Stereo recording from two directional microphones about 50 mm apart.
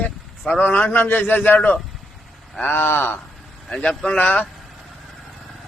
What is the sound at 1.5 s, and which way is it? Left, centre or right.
A man's voice, left.